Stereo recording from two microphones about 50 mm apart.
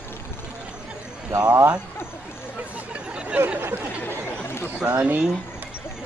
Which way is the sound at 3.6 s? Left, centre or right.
Right.